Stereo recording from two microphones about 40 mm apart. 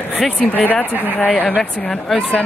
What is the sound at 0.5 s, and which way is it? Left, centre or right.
Speech, left.